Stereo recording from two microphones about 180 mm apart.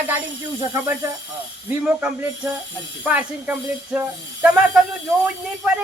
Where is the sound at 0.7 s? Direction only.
20° right (ahead or behind).